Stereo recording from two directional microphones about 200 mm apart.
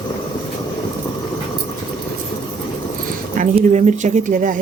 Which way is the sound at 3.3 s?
35° right (ahead or behind).